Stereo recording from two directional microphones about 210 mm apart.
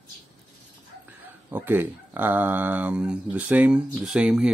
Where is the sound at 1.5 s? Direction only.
10° right (ahead or behind).